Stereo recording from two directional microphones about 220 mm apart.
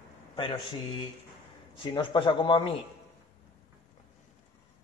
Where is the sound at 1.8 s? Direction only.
20° left (ahead or behind).